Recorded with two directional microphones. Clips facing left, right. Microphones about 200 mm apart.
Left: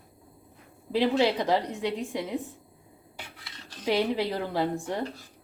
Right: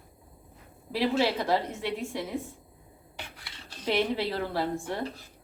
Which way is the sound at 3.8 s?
15° left (ahead or behind).